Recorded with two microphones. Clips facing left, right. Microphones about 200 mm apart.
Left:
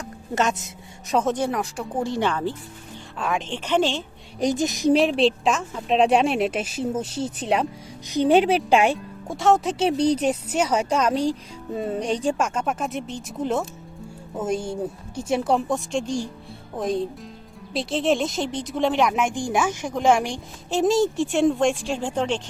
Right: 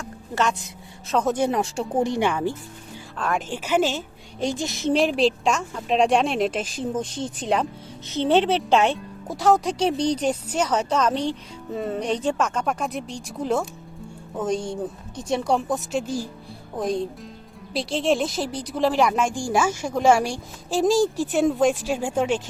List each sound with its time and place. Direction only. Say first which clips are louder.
0.3 s speech: left 1 dB; 20° left (ahead or behind)
1.5 s speech: right 3 dB; 25° right (ahead or behind)
3.2 s speech: even; centre (ahead or behind)
4.4 s speech: left 4 dB; 20° left (ahead or behind)
4.9 s a woman's voice: left 1 dB; centre (ahead or behind)
9.2 s a woman's voice: even; centre (ahead or behind)
19.3 s speech: even; 20° left (ahead or behind)
20.7 s a woman's voice: even; centre (ahead or behind)